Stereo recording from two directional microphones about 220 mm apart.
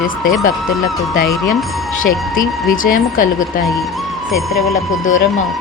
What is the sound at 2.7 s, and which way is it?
Speech, 40° left (ahead or behind).